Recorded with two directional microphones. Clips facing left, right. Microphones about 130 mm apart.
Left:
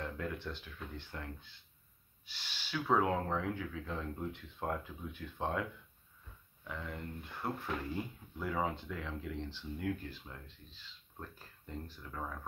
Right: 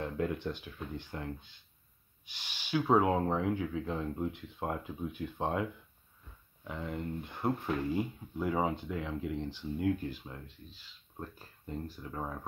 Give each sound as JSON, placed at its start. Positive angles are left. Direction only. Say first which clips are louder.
{"t": 0.0, "sound": "speech", "louder": "right 6 dB", "side_deg": -20}
{"t": 12.1, "sound": "speech", "louder": "right 3 dB", "side_deg": -25}